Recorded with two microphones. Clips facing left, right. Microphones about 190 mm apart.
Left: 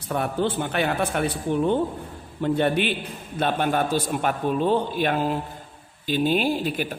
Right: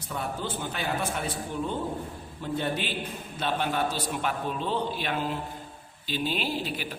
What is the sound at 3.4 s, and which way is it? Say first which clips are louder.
A man's voice: left 5 dB; 55° left (ahead or behind).